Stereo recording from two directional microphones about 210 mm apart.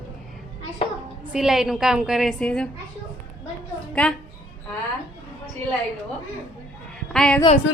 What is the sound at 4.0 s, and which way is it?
Speech, 5° left (ahead or behind).